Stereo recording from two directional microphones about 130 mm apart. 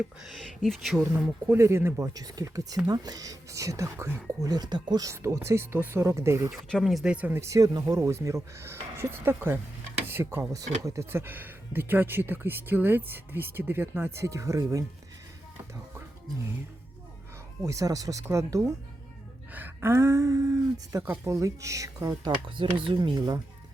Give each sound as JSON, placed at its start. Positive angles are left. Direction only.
{"t": 0.2, "sound": "speech", "side_deg": 0}
{"t": 1.0, "sound": "speech", "side_deg": -10}
{"t": 6.7, "sound": "speech", "side_deg": 5}
{"t": 17.6, "sound": "speech", "side_deg": -25}
{"t": 22.1, "sound": "speech", "side_deg": -40}